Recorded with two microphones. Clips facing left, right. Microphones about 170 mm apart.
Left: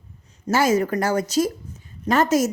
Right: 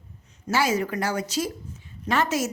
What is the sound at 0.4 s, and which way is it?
A woman's voice, 45° left (ahead or behind).